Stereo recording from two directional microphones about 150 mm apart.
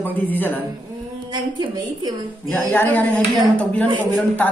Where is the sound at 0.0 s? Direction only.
10° left (ahead or behind).